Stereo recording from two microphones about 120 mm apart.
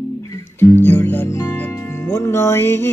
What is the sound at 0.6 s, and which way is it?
Music, 15° left (ahead or behind).